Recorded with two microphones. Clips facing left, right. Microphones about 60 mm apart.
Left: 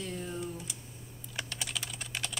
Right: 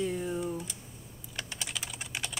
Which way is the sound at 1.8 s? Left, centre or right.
Centre.